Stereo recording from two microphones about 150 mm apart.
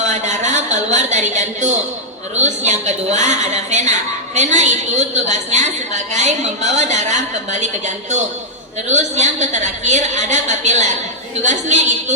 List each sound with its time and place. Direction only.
0.0 s a woman's voice: 50° right (ahead or behind)